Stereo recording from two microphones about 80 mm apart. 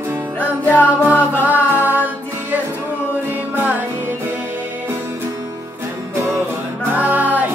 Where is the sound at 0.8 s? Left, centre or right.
Centre.